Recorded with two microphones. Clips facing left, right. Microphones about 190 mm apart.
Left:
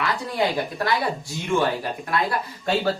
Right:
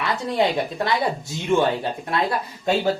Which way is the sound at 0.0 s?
25° right (ahead or behind).